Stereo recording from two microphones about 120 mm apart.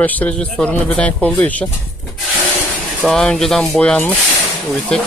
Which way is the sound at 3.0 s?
5° left (ahead or behind).